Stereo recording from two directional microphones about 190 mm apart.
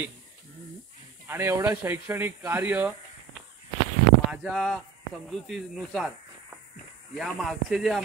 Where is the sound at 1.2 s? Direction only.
10° right (ahead or behind).